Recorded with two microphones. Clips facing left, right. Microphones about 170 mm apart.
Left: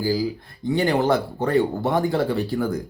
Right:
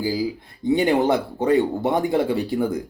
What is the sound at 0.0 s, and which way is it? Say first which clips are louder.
Speech: left 1 dB; 20° right (ahead or behind).